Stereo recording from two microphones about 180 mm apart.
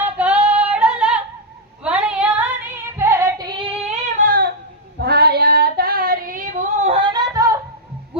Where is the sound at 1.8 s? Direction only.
5° right (ahead or behind).